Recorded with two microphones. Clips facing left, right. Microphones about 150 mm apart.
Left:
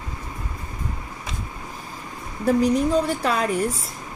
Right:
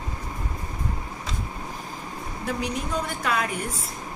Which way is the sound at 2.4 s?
35° left (ahead or behind).